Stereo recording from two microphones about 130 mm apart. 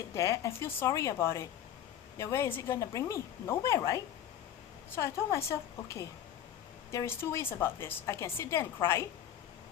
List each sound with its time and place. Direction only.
0.1 s a woman's voice: 25° left (ahead or behind)